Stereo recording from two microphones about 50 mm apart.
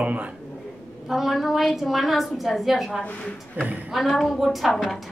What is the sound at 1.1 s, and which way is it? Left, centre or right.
A woman's voice, centre.